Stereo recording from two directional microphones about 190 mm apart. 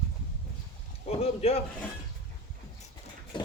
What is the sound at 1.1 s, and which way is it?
Speech, 30° left (ahead or behind).